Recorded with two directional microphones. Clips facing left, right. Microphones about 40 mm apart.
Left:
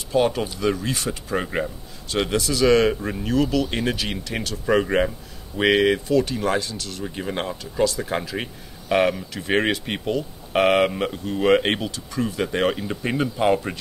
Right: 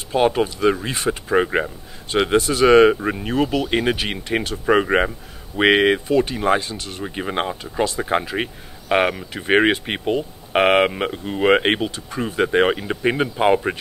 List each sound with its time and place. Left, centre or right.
0.1 s speech: right